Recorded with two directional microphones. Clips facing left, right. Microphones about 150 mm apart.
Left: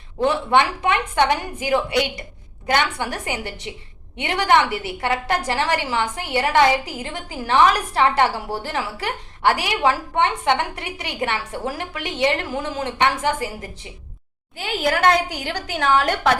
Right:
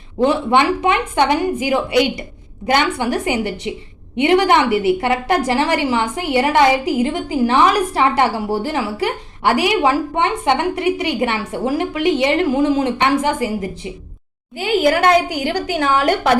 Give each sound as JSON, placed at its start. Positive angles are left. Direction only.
{"t": 0.2, "sound": "a woman's voice", "side_deg": -15}